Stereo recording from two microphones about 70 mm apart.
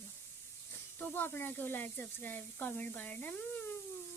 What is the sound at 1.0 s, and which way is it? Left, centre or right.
Speech, left.